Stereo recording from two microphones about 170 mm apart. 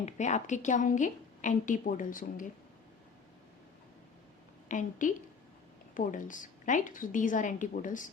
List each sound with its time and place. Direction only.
0.0 s a woman's voice: 45° left (ahead or behind)
4.7 s a woman's voice: 50° left (ahead or behind)